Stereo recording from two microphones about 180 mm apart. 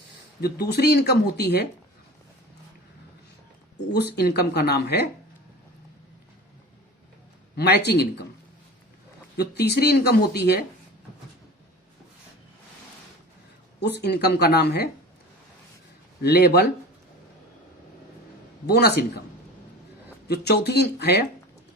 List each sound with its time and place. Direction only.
0.4 s speech: 60° left (ahead or behind)
3.9 s speech: 65° left (ahead or behind)
7.5 s speech: 65° left (ahead or behind)
9.4 s speech: 65° left (ahead or behind)
13.7 s speech: 70° left (ahead or behind)
16.2 s speech: 65° left (ahead or behind)
18.6 s speech: 65° left (ahead or behind)
20.2 s speech: 65° left (ahead or behind)